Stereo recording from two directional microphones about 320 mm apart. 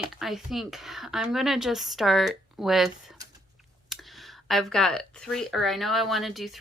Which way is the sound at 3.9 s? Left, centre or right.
Centre.